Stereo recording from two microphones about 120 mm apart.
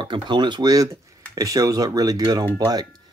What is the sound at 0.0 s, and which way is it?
Speech, 40° right (ahead or behind).